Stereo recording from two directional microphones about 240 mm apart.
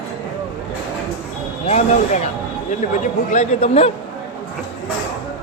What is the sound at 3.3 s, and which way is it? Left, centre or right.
Speech, left.